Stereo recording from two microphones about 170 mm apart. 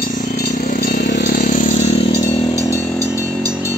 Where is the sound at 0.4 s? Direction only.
60° left (ahead or behind); by 2.0 s 45° left (ahead or behind).